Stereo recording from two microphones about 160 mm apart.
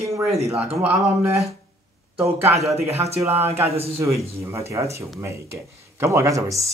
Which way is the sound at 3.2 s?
15° right (ahead or behind).